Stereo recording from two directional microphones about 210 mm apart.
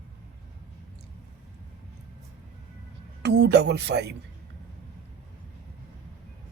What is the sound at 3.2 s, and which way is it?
Speech, 55° right (ahead or behind).